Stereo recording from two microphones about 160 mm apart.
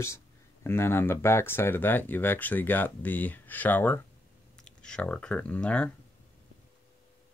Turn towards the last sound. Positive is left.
turn(degrees=5)  # may be behind; listen again after turning